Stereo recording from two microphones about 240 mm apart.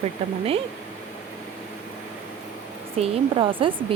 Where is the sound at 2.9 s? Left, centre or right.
Right.